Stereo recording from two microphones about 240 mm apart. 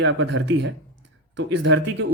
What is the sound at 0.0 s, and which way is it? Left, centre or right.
Speech, right.